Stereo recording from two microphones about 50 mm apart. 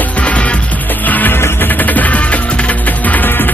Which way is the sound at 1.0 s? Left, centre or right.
Left.